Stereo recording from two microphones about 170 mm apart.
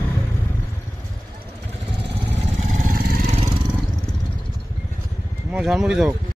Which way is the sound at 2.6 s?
45° right (ahead or behind).